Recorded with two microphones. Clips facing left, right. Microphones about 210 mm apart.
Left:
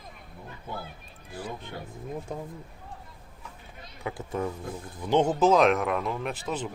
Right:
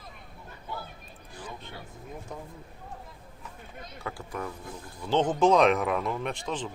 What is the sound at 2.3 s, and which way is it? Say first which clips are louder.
Speech: left 4 dB; 25° left (ahead or behind).